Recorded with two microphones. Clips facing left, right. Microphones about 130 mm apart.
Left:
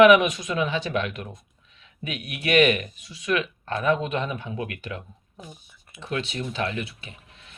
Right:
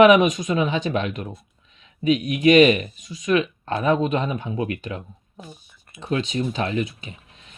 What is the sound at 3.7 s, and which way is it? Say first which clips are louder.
Speech: right 3 dB; 25° right (ahead or behind).